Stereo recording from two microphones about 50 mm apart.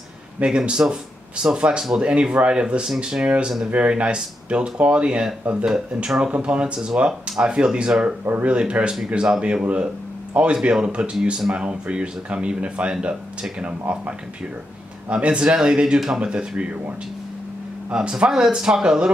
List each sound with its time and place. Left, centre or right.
0.4 s speech: centre
17.9 s speech: centre